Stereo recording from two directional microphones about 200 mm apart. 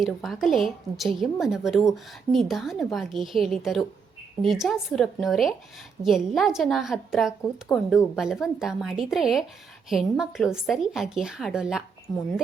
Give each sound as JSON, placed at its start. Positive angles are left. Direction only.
{"t": 0.0, "sound": "a woman's voice", "side_deg": 0}
{"t": 12.1, "sound": "speech", "side_deg": 15}